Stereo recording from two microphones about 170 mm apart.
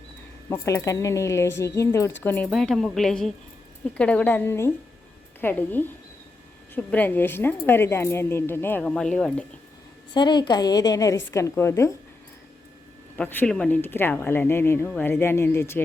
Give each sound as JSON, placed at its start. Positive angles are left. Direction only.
{"t": 0.5, "sound": "a woman's voice", "side_deg": 15}
{"t": 10.2, "sound": "a woman's voice", "side_deg": 25}
{"t": 13.1, "sound": "speech", "side_deg": 10}